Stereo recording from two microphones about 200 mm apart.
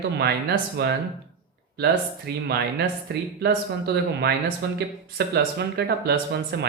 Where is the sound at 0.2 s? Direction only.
55° right (ahead or behind).